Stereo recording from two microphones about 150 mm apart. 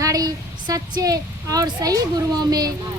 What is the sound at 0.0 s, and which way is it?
A woman's voice, 25° right (ahead or behind).